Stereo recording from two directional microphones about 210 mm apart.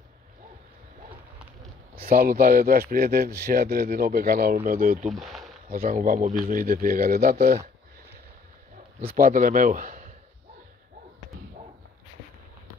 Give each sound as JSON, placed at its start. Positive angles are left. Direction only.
{"t": 2.0, "sound": "a man's voice", "side_deg": -45}
{"t": 5.0, "sound": "speech", "side_deg": 0}
{"t": 5.7, "sound": "a man's voice", "side_deg": -40}
{"t": 9.0, "sound": "a man's voice", "side_deg": -40}